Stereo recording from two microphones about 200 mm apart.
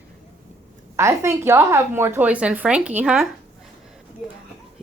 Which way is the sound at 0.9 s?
15° right (ahead or behind).